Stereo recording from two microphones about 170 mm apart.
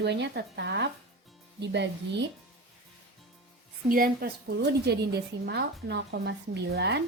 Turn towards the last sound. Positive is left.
turn(degrees=-80)